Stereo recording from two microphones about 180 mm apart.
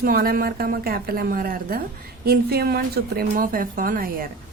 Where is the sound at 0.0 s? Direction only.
55° right (ahead or behind).